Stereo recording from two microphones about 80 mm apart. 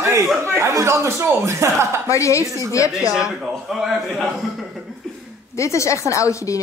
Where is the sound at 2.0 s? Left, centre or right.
Left.